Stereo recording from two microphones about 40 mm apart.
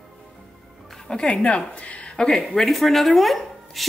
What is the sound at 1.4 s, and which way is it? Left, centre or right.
Speech, left.